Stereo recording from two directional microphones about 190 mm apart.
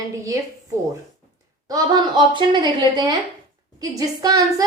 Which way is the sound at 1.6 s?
20° right (ahead or behind).